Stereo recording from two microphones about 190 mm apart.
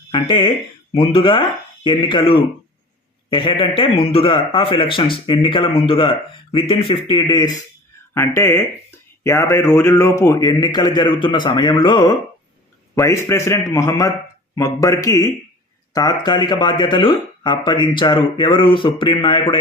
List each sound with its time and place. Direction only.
0.1 s a man's voice: 25° left (ahead or behind)